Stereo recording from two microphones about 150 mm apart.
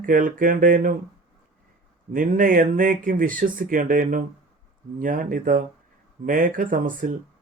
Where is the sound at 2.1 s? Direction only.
65° right (ahead or behind).